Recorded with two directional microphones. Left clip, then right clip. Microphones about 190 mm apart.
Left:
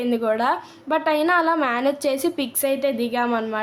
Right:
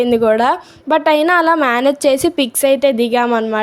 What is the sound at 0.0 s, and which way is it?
A woman's voice, 35° right (ahead or behind).